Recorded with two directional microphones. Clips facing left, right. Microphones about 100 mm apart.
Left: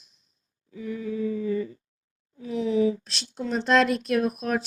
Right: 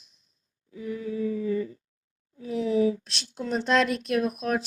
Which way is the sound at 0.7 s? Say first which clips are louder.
Left 1 dB; 30° left (ahead or behind).